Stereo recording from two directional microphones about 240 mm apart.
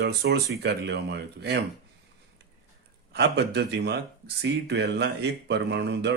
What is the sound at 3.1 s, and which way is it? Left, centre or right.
Speech, right.